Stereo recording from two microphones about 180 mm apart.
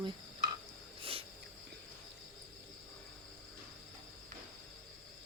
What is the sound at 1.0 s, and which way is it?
Wheeze, 30° right (ahead or behind).